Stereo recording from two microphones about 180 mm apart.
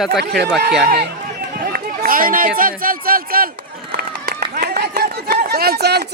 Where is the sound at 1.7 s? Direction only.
55° right (ahead or behind).